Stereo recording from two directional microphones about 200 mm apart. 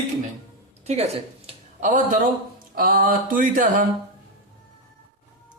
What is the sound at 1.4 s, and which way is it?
Speech, 40° right (ahead or behind).